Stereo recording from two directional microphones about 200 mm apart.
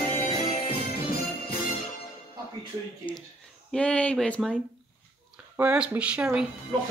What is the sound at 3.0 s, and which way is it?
Speech, 25° left (ahead or behind).